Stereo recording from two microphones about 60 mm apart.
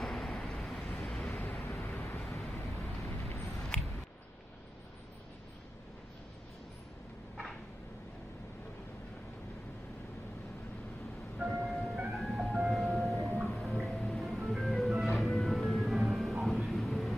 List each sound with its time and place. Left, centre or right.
0.0 s vehicle: centre
1.3 s vehicle: left
2.2 s vehicle: centre
2.6 s vehicle: left
11.3 s ice cream truck: centre
11.9 s music: centre